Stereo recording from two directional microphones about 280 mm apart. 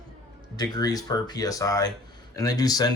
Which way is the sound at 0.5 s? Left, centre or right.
Centre.